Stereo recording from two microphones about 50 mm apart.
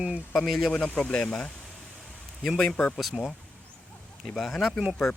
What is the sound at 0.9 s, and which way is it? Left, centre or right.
Speech, left.